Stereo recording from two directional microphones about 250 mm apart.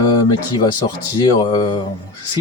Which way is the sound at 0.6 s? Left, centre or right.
Centre.